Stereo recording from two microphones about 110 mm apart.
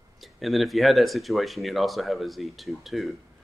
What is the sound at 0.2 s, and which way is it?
Speech, centre (ahead or behind).